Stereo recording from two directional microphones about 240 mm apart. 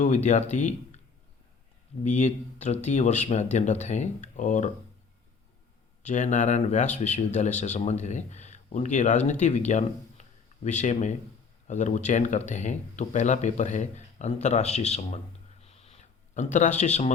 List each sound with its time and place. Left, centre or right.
0.0 s speech: left
2.0 s speech: left
6.0 s speech: left
15.6 s a sound: left